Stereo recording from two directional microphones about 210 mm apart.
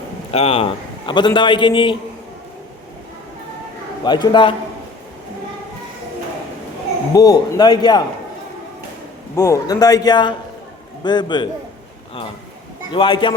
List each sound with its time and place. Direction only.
0.3 s a man's voice: 25° left (ahead or behind)
4.0 s a man's voice: 20° left (ahead or behind)
7.1 s a man's voice: 15° left (ahead or behind)
9.3 s a man's voice: 15° left (ahead or behind)
12.9 s a man's voice: 25° left (ahead or behind)